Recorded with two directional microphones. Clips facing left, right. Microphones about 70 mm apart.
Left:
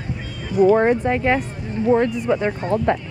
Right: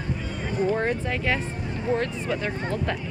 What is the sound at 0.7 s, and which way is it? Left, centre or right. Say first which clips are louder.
Speech: left 9 dB; left.